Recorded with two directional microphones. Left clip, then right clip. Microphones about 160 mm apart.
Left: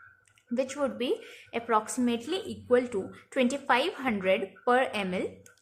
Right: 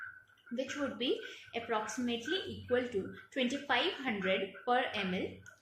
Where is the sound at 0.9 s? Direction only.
40° left (ahead or behind).